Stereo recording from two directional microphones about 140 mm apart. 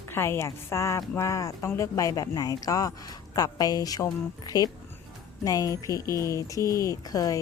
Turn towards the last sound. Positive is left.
turn(degrees=25)  # may be behind; listen again after turning